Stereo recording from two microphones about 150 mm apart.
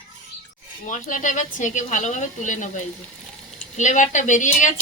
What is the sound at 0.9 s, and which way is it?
Speech, 60° left (ahead or behind).